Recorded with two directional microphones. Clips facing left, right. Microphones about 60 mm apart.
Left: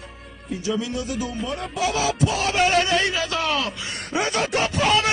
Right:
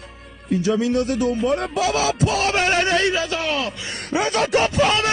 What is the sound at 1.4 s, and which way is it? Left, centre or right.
Speech, right.